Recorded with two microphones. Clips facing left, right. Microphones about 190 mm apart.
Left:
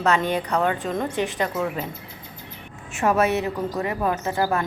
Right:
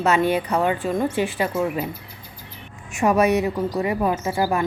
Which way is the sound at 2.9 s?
15° right (ahead or behind).